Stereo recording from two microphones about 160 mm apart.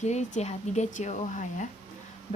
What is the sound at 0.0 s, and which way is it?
A woman's voice, 45° left (ahead or behind).